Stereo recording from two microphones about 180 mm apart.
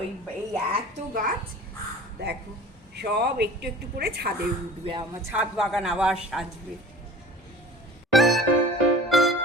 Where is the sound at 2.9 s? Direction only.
65° right (ahead or behind).